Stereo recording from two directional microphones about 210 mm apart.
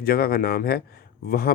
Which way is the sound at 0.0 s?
45° left (ahead or behind).